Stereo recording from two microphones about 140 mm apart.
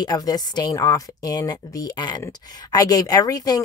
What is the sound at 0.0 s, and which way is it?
A woman's voice, 25° left (ahead or behind).